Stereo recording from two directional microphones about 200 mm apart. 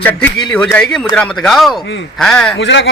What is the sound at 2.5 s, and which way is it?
Speech, 65° left (ahead or behind).